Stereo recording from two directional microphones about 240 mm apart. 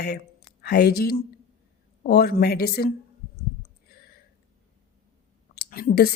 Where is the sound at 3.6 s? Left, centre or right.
Left.